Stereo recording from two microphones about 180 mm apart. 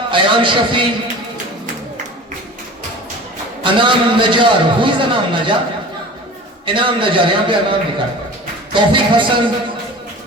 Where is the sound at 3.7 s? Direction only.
25° right (ahead or behind).